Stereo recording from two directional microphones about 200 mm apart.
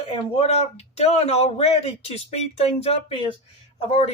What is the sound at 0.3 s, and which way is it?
Speech, 30° left (ahead or behind).